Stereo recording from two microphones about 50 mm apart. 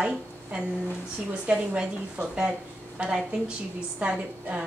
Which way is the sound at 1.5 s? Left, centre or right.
Right.